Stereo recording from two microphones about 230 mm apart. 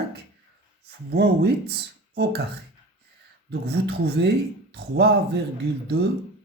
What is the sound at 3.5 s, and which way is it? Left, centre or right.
Speech, right.